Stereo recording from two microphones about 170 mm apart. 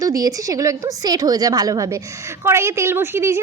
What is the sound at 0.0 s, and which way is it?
A woman's voice, 20° right (ahead or behind).